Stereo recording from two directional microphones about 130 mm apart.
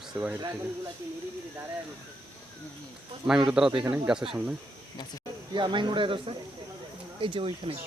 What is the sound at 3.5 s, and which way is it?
Speech, 5° right (ahead or behind).